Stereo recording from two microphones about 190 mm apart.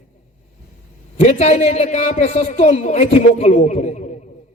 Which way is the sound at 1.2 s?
35° left (ahead or behind).